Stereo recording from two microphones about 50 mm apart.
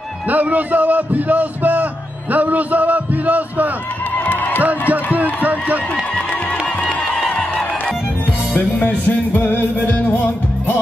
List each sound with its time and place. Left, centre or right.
0.3 s a man's voice: right
4.3 s music: left
4.6 s music: right
5.4 s a man's voice: right
9.0 s music: left